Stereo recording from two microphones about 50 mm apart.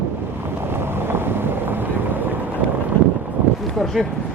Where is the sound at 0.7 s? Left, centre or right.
Right.